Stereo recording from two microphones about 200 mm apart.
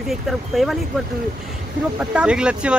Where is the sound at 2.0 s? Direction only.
5° right (ahead or behind).